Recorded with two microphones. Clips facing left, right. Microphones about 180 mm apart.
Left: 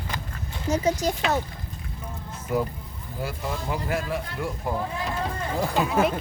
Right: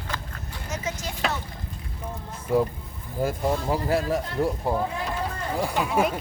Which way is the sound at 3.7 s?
35° right (ahead or behind).